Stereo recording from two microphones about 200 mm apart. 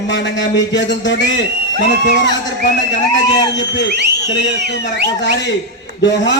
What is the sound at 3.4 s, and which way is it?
A man's voice, 60° left (ahead or behind).